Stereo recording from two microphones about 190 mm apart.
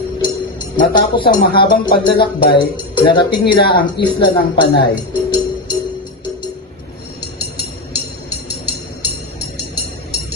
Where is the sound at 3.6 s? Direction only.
55° left (ahead or behind).